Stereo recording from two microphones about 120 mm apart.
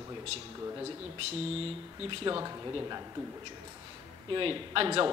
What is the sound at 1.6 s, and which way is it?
Speech, 50° right (ahead or behind).